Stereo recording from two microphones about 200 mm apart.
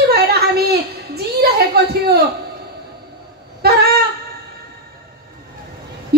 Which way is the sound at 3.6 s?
50° right (ahead or behind).